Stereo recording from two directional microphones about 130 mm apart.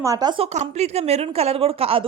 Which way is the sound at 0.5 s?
60° right (ahead or behind).